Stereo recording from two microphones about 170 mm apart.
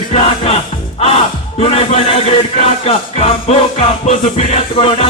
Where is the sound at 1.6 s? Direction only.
35° left (ahead or behind).